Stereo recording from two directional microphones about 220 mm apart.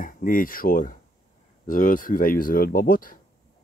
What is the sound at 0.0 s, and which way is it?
Speech, 40° left (ahead or behind).